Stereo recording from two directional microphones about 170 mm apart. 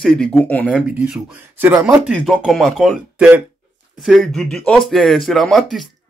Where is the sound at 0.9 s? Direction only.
5° right (ahead or behind).